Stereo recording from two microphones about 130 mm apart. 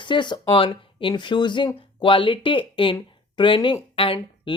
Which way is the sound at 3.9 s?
45° left (ahead or behind).